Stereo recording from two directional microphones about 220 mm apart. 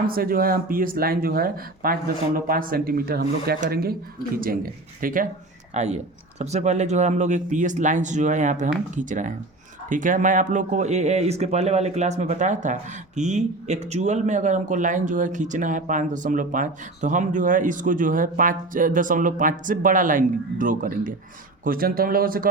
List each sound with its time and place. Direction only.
0.1 s speech: 40° right (ahead or behind)